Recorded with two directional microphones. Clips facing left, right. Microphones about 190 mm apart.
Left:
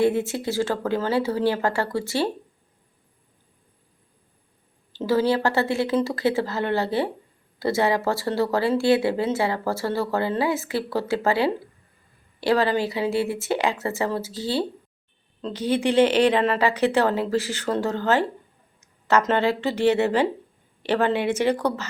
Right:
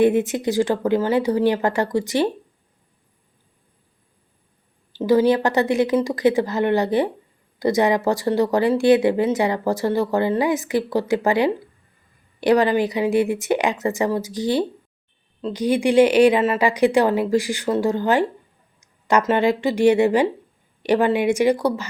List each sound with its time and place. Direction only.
0.0 s speech: 20° right (ahead or behind)
4.9 s speech: 15° right (ahead or behind)